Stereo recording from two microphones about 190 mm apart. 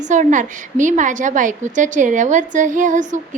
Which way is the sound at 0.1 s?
40° right (ahead or behind).